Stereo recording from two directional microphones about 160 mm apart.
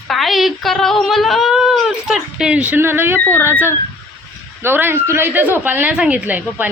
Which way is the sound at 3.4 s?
15° right (ahead or behind).